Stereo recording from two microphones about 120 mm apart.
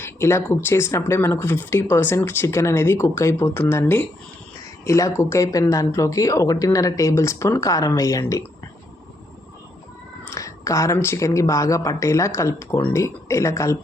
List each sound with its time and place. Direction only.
0.0 s speech: 20° left (ahead or behind)
10.2 s speech: 25° left (ahead or behind)